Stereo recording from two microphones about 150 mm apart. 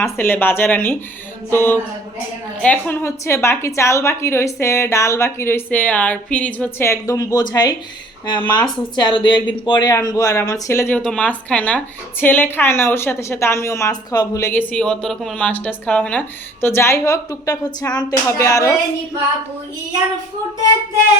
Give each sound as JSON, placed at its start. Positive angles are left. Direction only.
{"t": 0.0, "sound": "a woman's voice", "side_deg": 15}
{"t": 14.7, "sound": "a woman's voice", "side_deg": 5}